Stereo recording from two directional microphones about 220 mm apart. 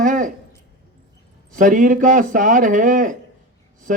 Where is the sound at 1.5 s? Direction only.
35° right (ahead or behind).